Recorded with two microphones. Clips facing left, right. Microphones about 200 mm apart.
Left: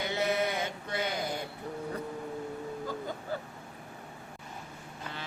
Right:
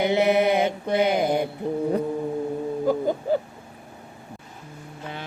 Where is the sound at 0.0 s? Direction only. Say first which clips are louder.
Right 11 dB; 75° right (ahead or behind).